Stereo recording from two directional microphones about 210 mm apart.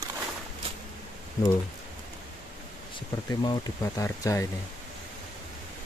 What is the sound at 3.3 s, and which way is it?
Speech, 20° left (ahead or behind).